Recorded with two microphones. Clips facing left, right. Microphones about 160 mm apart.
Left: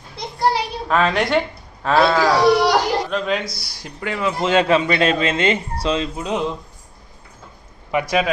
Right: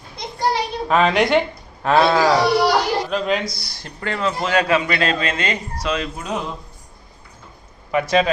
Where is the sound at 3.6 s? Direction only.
10° left (ahead or behind).